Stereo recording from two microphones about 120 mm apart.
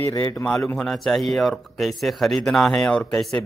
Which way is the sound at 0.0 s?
25° left (ahead or behind).